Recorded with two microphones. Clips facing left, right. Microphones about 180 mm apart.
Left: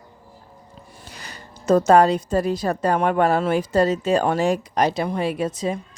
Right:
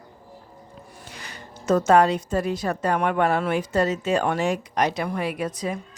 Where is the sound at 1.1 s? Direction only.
35° left (ahead or behind).